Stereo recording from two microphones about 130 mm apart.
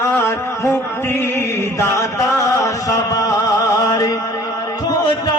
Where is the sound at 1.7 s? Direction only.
20° left (ahead or behind).